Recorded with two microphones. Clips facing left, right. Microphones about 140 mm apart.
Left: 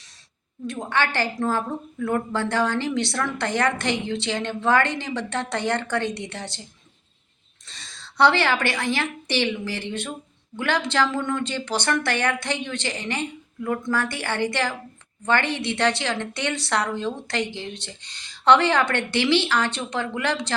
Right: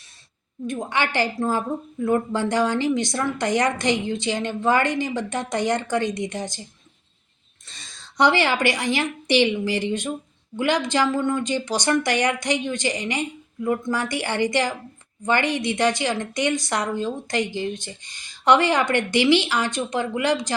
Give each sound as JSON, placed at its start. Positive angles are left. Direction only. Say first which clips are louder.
{"t": 0.7, "sound": "a woman's voice", "louder": "even", "side_deg": -15}
{"t": 7.7, "sound": "a woman's voice", "louder": "left 1 dB", "side_deg": -15}